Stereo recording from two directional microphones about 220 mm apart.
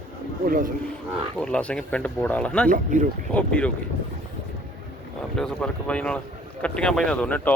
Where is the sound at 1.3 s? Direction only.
5° left (ahead or behind).